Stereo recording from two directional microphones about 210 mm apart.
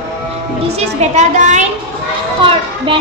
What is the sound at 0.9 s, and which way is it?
Speech, 35° right (ahead or behind).